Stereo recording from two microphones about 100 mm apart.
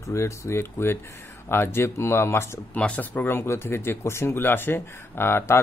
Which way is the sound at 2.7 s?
15° left (ahead or behind).